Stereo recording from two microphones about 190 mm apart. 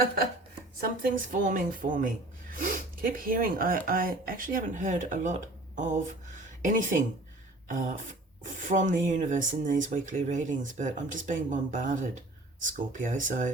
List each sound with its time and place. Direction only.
0.8 s a woman's voice: 45° right (ahead or behind)